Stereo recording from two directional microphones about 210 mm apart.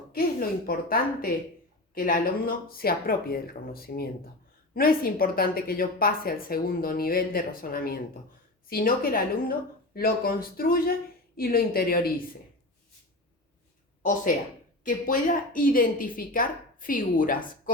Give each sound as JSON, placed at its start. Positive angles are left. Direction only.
{"t": 0.1, "sound": "a woman's voice", "side_deg": 45}
{"t": 14.0, "sound": "a woman's voice", "side_deg": 35}